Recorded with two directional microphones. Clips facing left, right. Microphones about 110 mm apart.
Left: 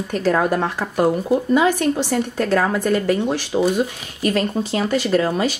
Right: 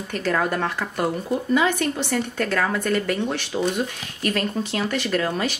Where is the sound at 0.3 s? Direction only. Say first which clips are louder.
Left 4 dB; 15° left (ahead or behind).